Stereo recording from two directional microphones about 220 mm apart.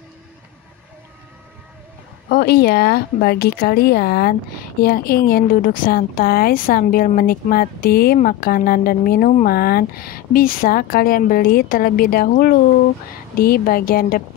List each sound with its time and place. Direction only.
2.2 s a woman's voice: 45° left (ahead or behind)